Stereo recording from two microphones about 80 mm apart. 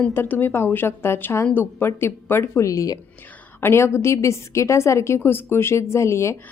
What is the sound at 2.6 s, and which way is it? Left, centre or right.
Speech, left.